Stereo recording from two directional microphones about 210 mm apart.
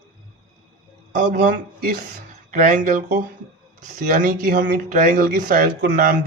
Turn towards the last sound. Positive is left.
turn(degrees=-45)  # may be behind; listen again after turning